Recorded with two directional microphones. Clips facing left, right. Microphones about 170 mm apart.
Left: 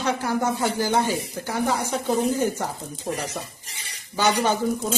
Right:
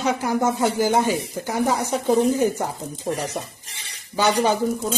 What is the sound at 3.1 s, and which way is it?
Speech, centre (ahead or behind).